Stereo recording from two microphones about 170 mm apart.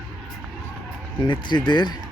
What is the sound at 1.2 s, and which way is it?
Speech, 25° left (ahead or behind).